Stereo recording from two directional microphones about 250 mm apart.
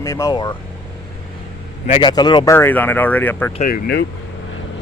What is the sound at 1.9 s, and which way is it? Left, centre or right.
Speech, centre.